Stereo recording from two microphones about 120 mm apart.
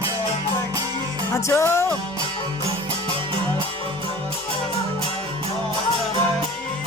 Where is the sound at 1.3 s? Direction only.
25° left (ahead or behind).